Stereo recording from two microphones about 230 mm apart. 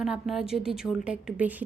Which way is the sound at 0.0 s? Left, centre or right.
Centre.